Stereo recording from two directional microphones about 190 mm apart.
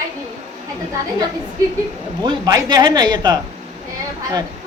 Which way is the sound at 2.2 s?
20° right (ahead or behind).